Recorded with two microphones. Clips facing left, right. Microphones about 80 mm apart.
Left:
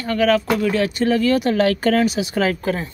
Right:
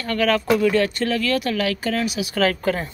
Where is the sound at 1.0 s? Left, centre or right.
Left.